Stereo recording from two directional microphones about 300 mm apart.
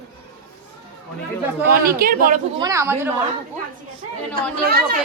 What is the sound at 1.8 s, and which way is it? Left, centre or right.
Speech, right.